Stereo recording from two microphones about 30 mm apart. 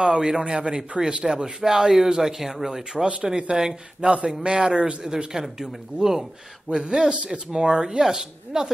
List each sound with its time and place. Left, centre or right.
0.0 s speech: right
3.2 s speech: right
6.7 s speech: right